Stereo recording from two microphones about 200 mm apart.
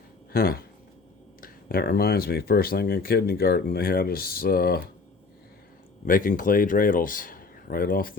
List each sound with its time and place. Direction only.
0.3 s speech: 50° left (ahead or behind)
6.1 s speech: 45° left (ahead or behind)